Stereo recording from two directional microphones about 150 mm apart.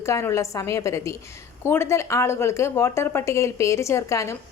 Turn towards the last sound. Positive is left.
turn(degrees=20)  # may be behind; listen again after turning